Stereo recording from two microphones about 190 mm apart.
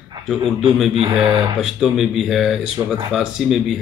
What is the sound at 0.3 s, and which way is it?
Speech, centre (ahead or behind).